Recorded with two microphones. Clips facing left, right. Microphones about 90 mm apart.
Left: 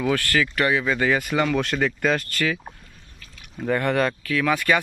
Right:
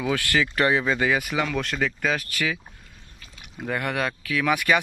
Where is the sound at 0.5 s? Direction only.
30° right (ahead or behind).